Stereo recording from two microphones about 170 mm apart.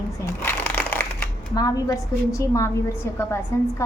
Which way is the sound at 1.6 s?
20° left (ahead or behind).